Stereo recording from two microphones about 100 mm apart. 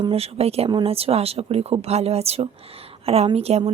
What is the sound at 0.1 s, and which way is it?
Speech, 90° right.